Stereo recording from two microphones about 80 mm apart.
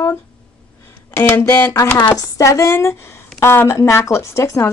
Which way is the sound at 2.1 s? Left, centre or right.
Left.